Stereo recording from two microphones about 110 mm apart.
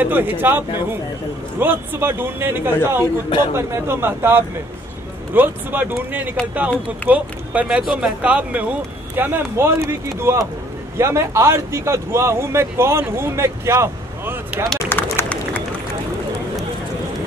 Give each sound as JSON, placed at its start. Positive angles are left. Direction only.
{"t": 0.0, "sound": "a man's voice", "side_deg": -20}
{"t": 3.3, "sound": "a man's voice", "side_deg": 50}
{"t": 3.5, "sound": "a man's voice", "side_deg": -25}
{"t": 14.8, "sound": "run", "side_deg": 20}